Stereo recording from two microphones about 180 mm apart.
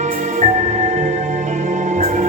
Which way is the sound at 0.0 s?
40° right (ahead or behind).